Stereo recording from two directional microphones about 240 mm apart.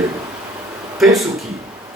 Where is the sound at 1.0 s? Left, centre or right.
Centre.